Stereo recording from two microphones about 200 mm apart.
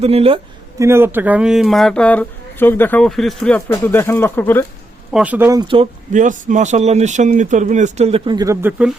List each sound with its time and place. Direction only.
0.0 s a man's voice: 30° right (ahead or behind)
0.8 s speech: 15° right (ahead or behind); by 4.6 s 10° left (ahead or behind)
5.1 s speech: 5° right (ahead or behind)
5.5 s a man's voice: 25° right (ahead or behind)
6.1 s speech: 40° right (ahead or behind); by 8.7 s 15° right (ahead or behind)